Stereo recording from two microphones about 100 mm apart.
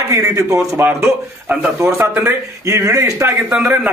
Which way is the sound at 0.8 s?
20° right (ahead or behind).